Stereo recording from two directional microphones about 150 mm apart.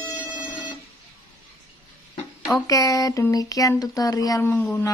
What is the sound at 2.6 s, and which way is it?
A woman's voice, 20° left (ahead or behind).